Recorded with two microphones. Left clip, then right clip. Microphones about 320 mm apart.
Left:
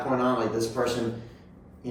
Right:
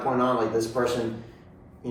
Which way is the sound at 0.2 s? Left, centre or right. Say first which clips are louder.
Right 2 dB; centre.